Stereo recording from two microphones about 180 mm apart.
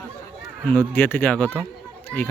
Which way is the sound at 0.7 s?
10° left (ahead or behind).